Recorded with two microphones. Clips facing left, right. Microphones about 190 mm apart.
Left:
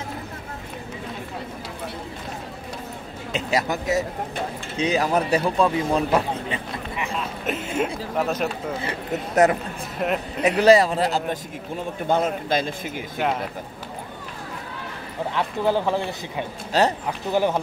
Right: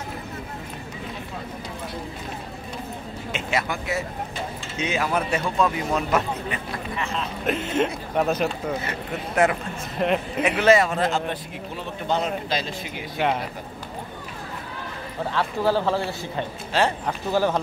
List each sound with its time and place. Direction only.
3.3 s speech: 35° left (ahead or behind)
7.2 s speech: 5° left (ahead or behind)
8.8 s speech: 40° left (ahead or behind)
9.9 s speech: centre (ahead or behind)
10.4 s speech: 35° left (ahead or behind)
11.7 s speech: 50° left (ahead or behind)
15.3 s a man's voice: 15° left (ahead or behind)
16.7 s speech: 40° left (ahead or behind)
17.3 s a man's voice: 15° left (ahead or behind)